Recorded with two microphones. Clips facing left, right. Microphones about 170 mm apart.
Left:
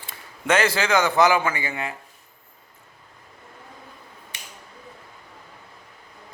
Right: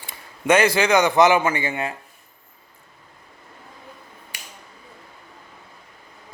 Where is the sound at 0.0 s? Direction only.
15° right (ahead or behind).